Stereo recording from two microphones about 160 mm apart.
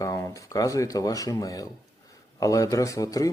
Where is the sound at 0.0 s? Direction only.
20° left (ahead or behind).